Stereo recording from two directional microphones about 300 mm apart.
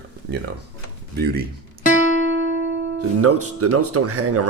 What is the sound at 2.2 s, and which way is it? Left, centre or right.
Music, right.